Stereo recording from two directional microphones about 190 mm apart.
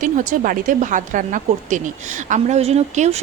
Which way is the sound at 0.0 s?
45° right (ahead or behind).